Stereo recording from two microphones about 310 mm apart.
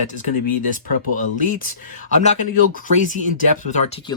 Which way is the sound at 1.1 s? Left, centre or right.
Left.